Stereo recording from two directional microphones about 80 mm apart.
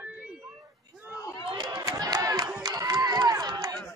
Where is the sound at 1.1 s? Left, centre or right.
Left.